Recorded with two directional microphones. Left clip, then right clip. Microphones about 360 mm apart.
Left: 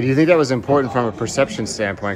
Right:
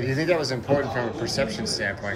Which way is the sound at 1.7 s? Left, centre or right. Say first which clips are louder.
Left 5 dB; centre.